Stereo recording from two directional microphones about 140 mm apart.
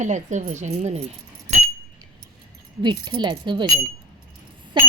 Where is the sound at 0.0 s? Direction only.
60° right (ahead or behind).